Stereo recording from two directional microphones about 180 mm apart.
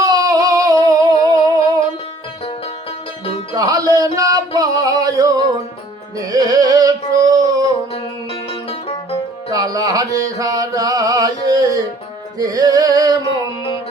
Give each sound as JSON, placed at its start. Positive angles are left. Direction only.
{"t": 0.0, "sound": "music", "side_deg": -20}
{"t": 3.5, "sound": "music", "side_deg": -20}
{"t": 8.3, "sound": "music", "side_deg": 35}
{"t": 9.5, "sound": "music", "side_deg": -20}